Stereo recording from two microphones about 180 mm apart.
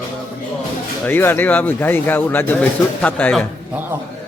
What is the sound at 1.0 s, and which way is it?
A man's voice, 10° left (ahead or behind).